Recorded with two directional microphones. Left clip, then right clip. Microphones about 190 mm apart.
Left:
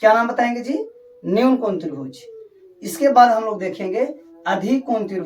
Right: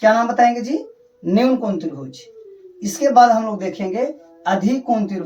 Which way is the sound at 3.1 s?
20° left (ahead or behind).